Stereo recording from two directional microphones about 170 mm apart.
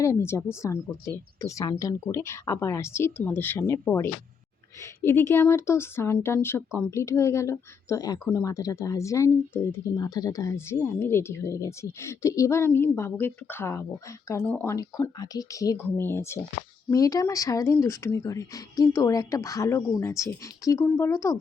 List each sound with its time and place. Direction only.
0.0 s a woman's voice: 15° left (ahead or behind)